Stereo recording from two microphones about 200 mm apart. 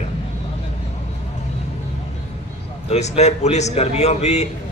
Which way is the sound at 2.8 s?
30° left (ahead or behind).